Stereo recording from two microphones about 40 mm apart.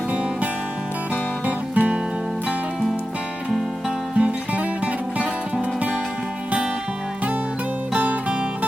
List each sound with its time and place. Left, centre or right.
1.1 s music: right
4.2 s music: right